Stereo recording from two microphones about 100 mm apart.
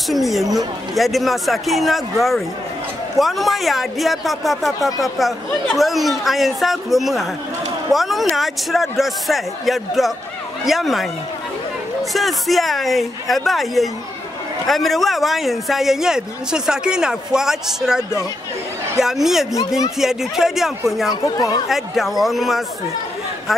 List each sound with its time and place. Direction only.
0.1 s speech: centre (ahead or behind)
12.1 s speech: centre (ahead or behind)
21.1 s speech: 40° left (ahead or behind)
21.6 s speech: centre (ahead or behind)